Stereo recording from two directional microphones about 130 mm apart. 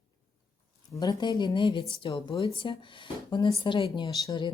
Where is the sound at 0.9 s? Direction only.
30° left (ahead or behind).